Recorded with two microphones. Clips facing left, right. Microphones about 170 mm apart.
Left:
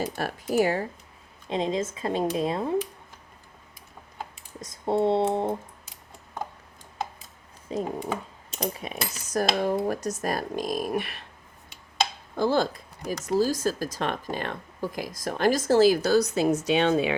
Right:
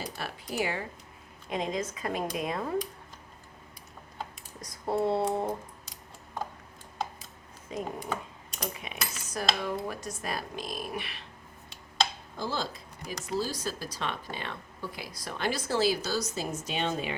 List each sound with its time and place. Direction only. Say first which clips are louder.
0.2 s speech: left 9 dB; 45° left (ahead or behind)
1.5 s speech: left 5 dB; 25° left (ahead or behind)
4.6 s speech: left 5 dB; 25° left (ahead or behind)
7.7 s speech: left 5 dB; 35° left (ahead or behind); by 11.3 s 50° left (ahead or behind)
12.4 s speech: left 10 dB; 55° left (ahead or behind)
13.1 s speech: left 8 dB; 45° left (ahead or behind)
16.0 s a woman's voice: left 11 dB; 60° left (ahead or behind); by 17.2 s 75° left (ahead or behind)